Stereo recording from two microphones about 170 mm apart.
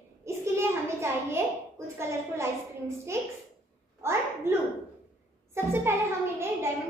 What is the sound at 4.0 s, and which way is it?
A child's voice, 15° right (ahead or behind).